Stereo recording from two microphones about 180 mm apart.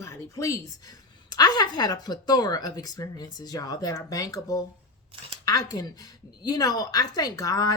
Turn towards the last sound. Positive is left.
turn(degrees=20)  # may be behind; listen again after turning